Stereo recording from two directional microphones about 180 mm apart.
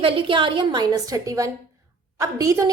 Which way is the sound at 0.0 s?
30° right (ahead or behind).